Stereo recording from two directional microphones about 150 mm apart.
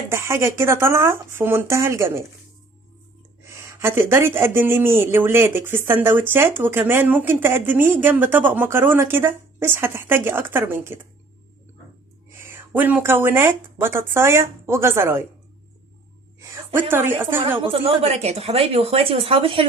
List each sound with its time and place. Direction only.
0.1 s speech: 15° right (ahead or behind)
3.4 s speech: 20° right (ahead or behind)
12.3 s speech: 15° right (ahead or behind)
16.9 s speech: 15° right (ahead or behind)
17.6 s a woman's voice: 40° right (ahead or behind)